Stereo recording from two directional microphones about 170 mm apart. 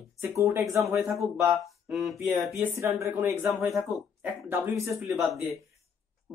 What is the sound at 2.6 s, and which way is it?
Speech, 15° right (ahead or behind).